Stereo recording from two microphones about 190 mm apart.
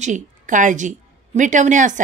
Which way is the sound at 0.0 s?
40° right (ahead or behind).